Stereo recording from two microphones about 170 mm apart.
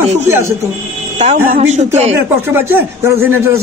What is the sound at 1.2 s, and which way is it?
Speech, 40° right (ahead or behind).